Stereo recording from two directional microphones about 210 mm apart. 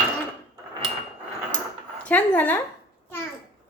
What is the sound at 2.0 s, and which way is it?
Speech, 5° left (ahead or behind).